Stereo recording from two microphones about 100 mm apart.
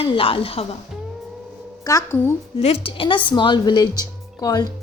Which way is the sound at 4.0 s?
40° left (ahead or behind).